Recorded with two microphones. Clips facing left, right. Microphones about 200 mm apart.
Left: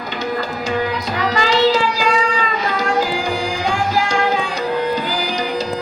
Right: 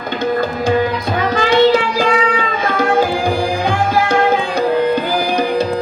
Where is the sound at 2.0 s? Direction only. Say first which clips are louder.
Right 3 dB; 55° right (ahead or behind).